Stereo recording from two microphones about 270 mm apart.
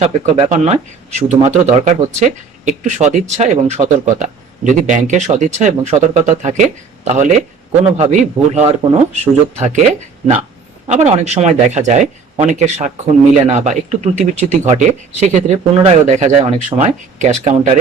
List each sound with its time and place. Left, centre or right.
0.0 s speech: right
10.8 s speech: right